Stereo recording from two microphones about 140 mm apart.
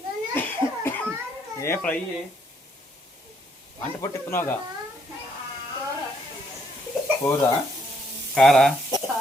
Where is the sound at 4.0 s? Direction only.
20° left (ahead or behind).